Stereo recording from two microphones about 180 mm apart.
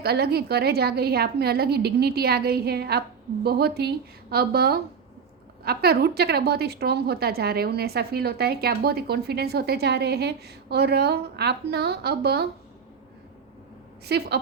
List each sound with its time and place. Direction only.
0.0 s a woman's voice: 60° right (ahead or behind)
14.0 s a woman's voice: 65° right (ahead or behind)